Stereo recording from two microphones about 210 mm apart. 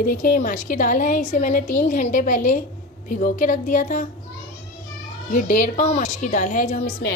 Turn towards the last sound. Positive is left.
turn(degrees=40)  # may be behind; listen again after turning